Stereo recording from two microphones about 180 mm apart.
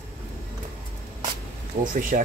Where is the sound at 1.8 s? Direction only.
45° right (ahead or behind).